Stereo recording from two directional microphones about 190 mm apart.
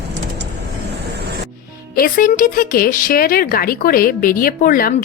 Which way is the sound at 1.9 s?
50° left (ahead or behind).